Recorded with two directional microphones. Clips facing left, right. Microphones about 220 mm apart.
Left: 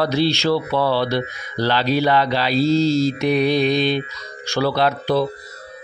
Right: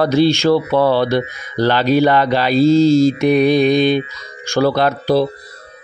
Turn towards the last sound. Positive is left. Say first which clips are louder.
# right 4 dB
turn(degrees=-40)  # may be behind; listen again after turning